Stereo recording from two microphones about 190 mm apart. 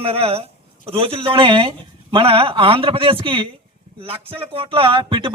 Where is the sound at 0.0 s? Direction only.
30° right (ahead or behind).